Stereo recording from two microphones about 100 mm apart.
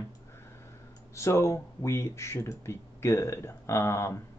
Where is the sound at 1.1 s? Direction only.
30° left (ahead or behind).